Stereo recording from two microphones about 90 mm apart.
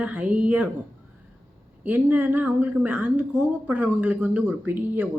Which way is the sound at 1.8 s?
20° right (ahead or behind).